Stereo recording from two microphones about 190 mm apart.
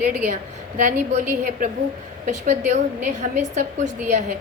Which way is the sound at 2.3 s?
40° right (ahead or behind).